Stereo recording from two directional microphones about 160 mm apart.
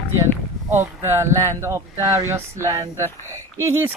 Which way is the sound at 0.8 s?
15° right (ahead or behind).